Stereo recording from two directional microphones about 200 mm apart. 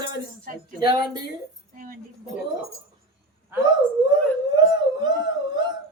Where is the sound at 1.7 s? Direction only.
45° right (ahead or behind).